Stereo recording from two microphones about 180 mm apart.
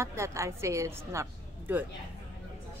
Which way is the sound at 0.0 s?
15° right (ahead or behind).